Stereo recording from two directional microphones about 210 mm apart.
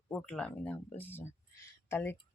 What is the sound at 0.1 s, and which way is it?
Speech, 5° left (ahead or behind).